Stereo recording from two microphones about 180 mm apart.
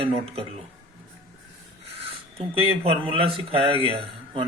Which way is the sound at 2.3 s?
30° right (ahead or behind).